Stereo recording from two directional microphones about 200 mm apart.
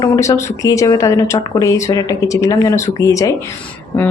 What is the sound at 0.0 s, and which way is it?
Speech, 15° left (ahead or behind).